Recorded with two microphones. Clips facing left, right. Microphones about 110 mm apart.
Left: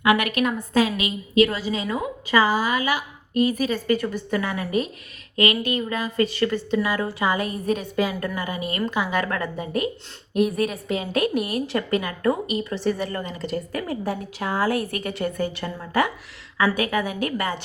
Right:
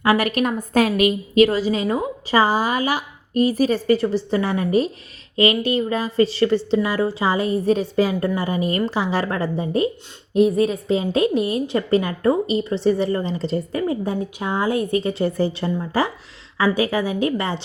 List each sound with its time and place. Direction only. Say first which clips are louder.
0.0 s a woman's voice: right 2 dB; 35° right (ahead or behind)
0.7 s a woman's voice: right 5 dB; 50° right (ahead or behind); by 17.6 s 25° right (ahead or behind)